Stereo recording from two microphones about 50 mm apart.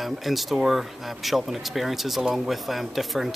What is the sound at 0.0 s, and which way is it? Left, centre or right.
Speech, centre.